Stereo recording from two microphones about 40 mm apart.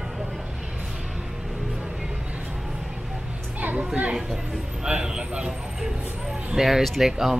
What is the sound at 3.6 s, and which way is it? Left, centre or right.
Speech, right.